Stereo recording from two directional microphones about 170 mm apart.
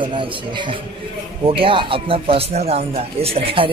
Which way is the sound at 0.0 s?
30° right (ahead or behind).